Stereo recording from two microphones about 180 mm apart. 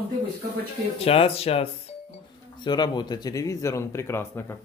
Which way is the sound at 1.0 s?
35° left (ahead or behind).